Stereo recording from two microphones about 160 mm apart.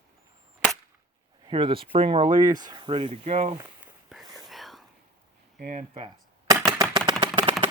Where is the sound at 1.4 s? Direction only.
30° right (ahead or behind).